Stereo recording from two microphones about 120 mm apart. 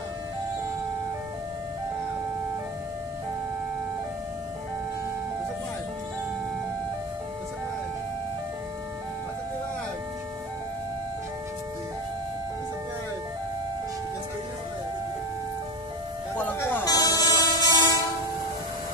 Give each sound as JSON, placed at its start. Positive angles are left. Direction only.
{"t": 16.5, "sound": "music", "side_deg": 20}
{"t": 16.8, "sound": "train", "side_deg": 30}